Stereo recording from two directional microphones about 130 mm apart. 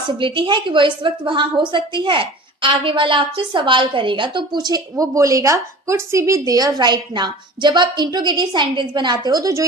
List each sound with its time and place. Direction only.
0.2 s a woman's voice: 40° right (ahead or behind)